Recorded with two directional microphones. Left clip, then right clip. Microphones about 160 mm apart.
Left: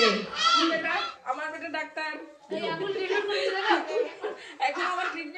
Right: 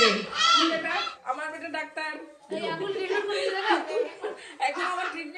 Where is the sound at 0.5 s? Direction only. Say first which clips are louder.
Right 1 dB; 5° right (ahead or behind).